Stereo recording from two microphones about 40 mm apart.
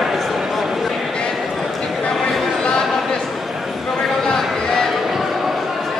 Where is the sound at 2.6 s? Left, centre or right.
Centre.